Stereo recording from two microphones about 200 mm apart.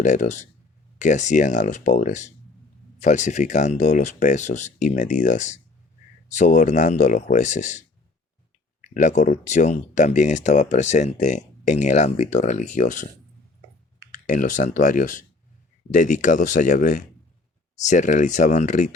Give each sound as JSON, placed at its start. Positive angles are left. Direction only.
{"t": 0.0, "sound": "speech", "side_deg": 35}
{"t": 14.1, "sound": "speech", "side_deg": 40}